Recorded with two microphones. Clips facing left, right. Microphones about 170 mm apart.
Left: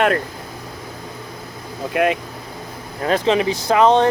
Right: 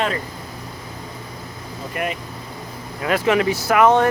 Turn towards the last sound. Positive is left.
turn(degrees=25)  # may be behind; listen again after turning